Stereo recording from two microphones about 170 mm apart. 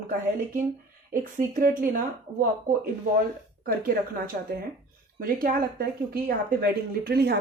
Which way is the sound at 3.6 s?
55° right (ahead or behind).